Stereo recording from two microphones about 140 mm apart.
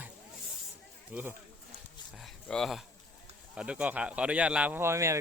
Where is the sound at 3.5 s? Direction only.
10° right (ahead or behind).